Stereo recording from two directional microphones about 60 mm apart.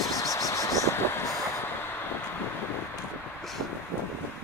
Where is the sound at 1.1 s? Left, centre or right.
Left.